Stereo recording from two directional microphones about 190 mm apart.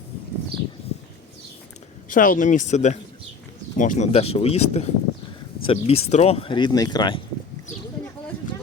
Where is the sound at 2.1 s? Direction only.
45° left (ahead or behind); by 7.2 s 25° left (ahead or behind).